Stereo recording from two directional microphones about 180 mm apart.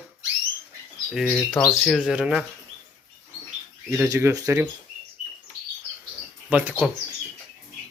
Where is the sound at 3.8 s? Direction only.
15° right (ahead or behind).